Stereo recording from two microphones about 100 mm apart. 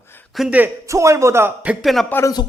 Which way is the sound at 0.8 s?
30° right (ahead or behind).